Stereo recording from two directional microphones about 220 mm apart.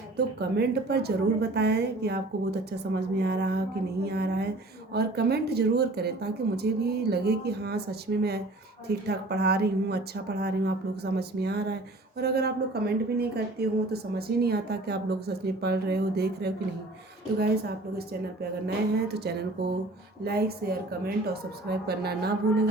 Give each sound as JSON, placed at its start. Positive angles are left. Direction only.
{"t": 0.3, "sound": "a woman's voice", "side_deg": -45}
{"t": 20.2, "sound": "a woman's voice", "side_deg": -45}